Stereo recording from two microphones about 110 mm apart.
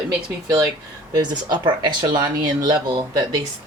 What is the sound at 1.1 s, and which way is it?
Speech, 40° right (ahead or behind).